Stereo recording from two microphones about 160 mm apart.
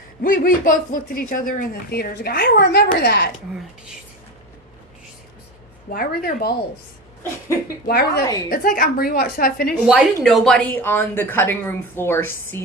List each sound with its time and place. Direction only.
0.2 s speech: 60° left (ahead or behind); by 3.3 s 80° left
5.9 s a woman's voice: 70° left (ahead or behind)
7.9 s a woman's voice: 75° left (ahead or behind)
8.4 s speech: 60° left (ahead or behind)
10.2 s a woman's voice: centre (ahead or behind)